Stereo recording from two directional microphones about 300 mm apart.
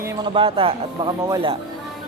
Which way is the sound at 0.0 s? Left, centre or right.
Centre.